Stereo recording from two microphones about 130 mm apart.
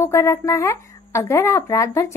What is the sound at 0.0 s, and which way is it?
Speech, 20° left (ahead or behind).